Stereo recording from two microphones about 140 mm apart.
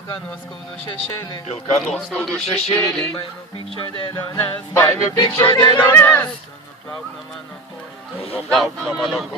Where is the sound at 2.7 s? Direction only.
5° left (ahead or behind).